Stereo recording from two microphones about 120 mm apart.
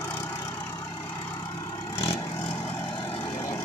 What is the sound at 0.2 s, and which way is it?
Vehicle, 25° left (ahead or behind).